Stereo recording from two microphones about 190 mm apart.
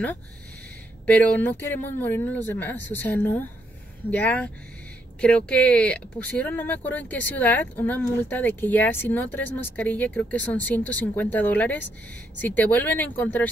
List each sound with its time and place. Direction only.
1.0 s speech: 10° left (ahead or behind)